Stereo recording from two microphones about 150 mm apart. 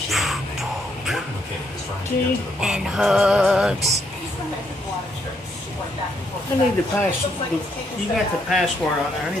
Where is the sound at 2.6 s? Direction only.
Centre (ahead or behind).